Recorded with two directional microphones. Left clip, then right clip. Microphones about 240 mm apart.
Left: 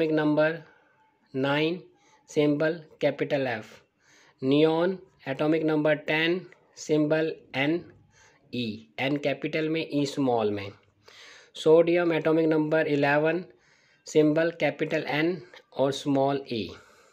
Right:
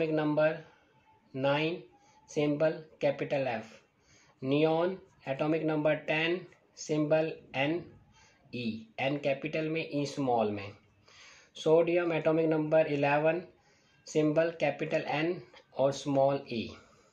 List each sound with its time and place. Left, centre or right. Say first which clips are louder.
0.0 s speech: left 5 dB; left